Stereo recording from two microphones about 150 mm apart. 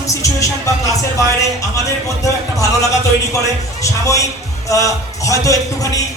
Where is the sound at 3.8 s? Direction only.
20° left (ahead or behind).